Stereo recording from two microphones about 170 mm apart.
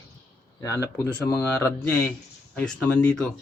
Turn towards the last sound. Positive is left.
turn(degrees=5)  # may be behind; listen again after turning